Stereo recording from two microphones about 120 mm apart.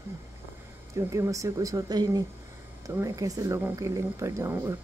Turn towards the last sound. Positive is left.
turn(degrees=-20)  # may be behind; listen again after turning